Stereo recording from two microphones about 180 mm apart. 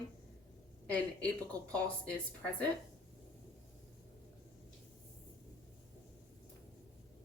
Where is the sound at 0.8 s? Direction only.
5° left (ahead or behind).